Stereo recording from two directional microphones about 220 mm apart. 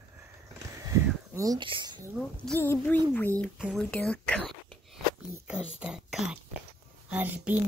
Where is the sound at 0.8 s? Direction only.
15° right (ahead or behind).